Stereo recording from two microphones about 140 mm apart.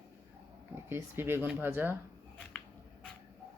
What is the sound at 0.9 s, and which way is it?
Speech, 15° right (ahead or behind).